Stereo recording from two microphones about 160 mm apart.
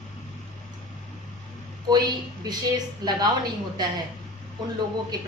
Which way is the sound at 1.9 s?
25° right (ahead or behind).